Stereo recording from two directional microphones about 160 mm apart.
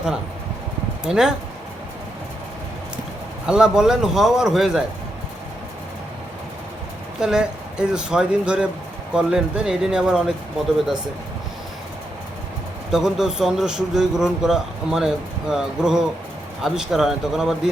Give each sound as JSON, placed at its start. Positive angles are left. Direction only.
{"t": 1.0, "sound": "a man's voice", "side_deg": -5}
{"t": 3.4, "sound": "a man's voice", "side_deg": -5}
{"t": 7.2, "sound": "a man's voice", "side_deg": -5}
{"t": 12.9, "sound": "a man's voice", "side_deg": -5}